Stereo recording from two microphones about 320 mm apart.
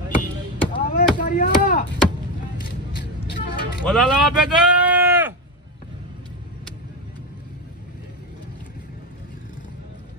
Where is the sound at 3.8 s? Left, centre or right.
Centre.